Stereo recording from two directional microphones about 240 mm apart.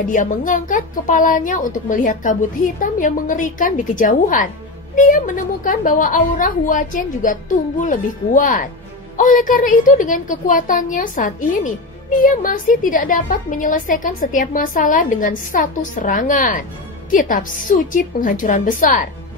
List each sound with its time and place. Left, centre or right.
0.0 s a woman's voice: left